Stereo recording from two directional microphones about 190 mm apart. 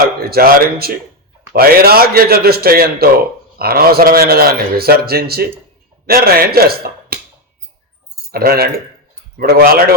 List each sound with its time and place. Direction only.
0.3 s a man's voice: 55° right (ahead or behind)
8.3 s a man's voice: 50° right (ahead or behind)